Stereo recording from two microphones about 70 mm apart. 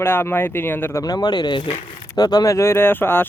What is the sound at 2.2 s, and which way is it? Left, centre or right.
Speech, left.